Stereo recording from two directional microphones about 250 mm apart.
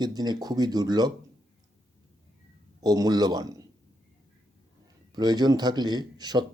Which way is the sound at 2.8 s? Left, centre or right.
Centre.